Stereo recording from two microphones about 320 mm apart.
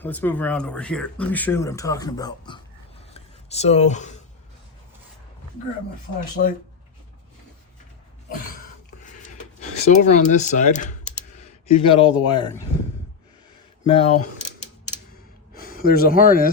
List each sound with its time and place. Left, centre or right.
0.0 s speech: centre
3.1 s a sound: centre
6.4 s speech: left
9.0 s a sound: left
13.9 s speech: centre
15.5 s speech: left